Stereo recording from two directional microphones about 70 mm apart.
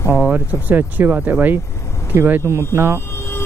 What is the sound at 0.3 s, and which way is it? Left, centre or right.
Speech, right.